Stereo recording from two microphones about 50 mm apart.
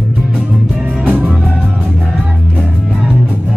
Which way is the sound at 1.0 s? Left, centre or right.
Right.